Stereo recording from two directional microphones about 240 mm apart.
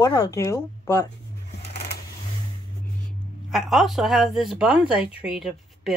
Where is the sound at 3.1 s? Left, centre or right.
Centre.